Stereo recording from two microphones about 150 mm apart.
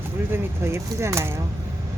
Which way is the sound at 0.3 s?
15° right (ahead or behind).